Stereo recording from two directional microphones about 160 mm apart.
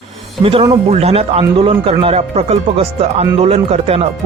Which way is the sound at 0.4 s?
40° right (ahead or behind).